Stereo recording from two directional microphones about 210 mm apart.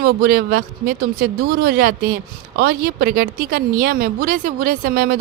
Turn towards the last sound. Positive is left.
turn(degrees=-45)  # may be behind; listen again after turning